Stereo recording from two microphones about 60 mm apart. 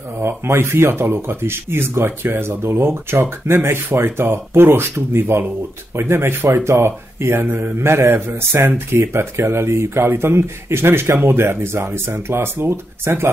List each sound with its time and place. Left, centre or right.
0.2 s speech: right